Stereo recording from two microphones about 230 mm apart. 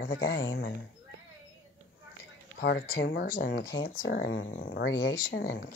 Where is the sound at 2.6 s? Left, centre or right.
Left.